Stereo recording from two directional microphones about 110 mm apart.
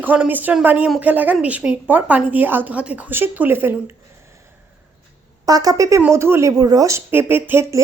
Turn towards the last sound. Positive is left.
turn(degrees=-20)  # may be behind; listen again after turning